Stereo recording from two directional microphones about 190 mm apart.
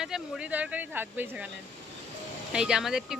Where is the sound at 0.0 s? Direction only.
5° right (ahead or behind).